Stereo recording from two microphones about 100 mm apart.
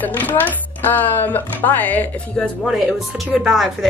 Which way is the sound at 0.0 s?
20° left (ahead or behind).